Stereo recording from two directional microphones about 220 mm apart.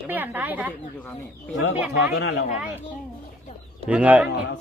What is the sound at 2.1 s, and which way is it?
Speech, 50° left (ahead or behind).